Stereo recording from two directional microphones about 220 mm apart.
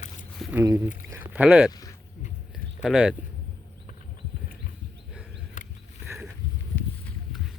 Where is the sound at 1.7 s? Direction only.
15° left (ahead or behind).